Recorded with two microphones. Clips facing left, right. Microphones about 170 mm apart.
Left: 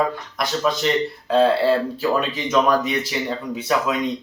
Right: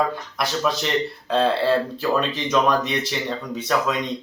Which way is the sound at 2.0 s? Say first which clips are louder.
Left 1 dB; 5° left (ahead or behind).